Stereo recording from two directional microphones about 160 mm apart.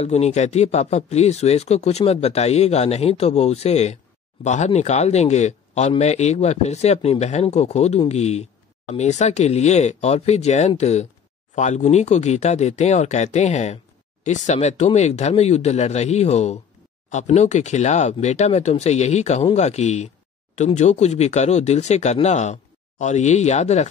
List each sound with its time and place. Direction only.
0.0 s speech: 45° left (ahead or behind)